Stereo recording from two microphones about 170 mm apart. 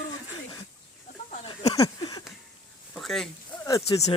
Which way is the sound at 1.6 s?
20° left (ahead or behind).